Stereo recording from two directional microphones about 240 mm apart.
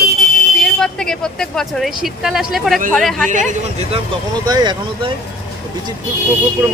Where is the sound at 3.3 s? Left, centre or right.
Right.